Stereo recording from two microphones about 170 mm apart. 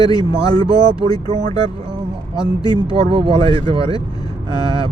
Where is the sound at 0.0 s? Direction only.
25° left (ahead or behind).